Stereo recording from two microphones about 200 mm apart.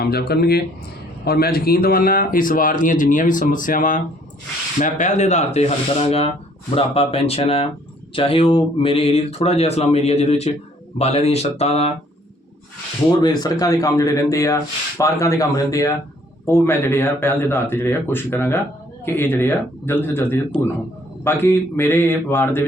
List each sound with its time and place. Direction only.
0.0 s a man's voice: 50° left (ahead or behind); by 11.9 s 30° left (ahead or behind)
13.1 s speech: 20° left (ahead or behind)